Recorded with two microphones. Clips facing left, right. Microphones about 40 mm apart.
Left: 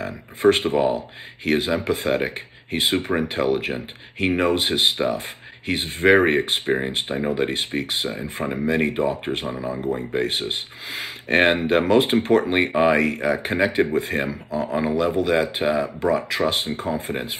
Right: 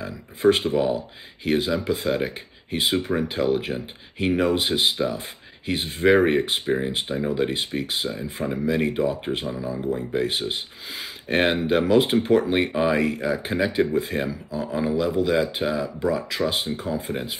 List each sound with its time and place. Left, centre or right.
0.0 s speech: left
9.6 s speech: left